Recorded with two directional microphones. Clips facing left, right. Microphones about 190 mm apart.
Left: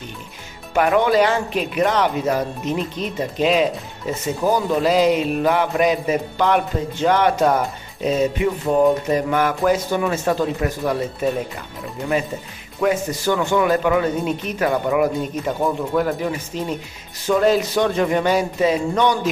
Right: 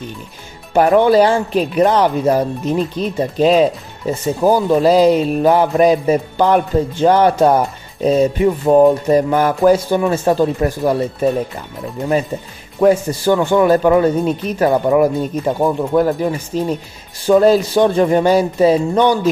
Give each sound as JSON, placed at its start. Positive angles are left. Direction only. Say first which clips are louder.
{"t": 0.7, "sound": "speech", "louder": "right 5 dB", "side_deg": -35}
{"t": 12.8, "sound": "speech", "louder": "right 7 dB", "side_deg": -30}